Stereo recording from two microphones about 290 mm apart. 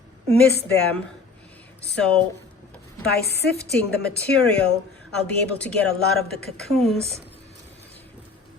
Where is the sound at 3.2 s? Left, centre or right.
Left.